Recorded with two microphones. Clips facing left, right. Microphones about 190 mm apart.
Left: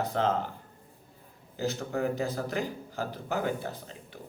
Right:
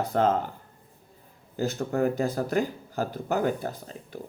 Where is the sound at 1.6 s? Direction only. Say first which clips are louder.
Right 4 dB; 45° right (ahead or behind).